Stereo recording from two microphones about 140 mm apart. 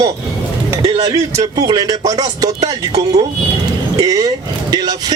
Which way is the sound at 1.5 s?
30° right (ahead or behind).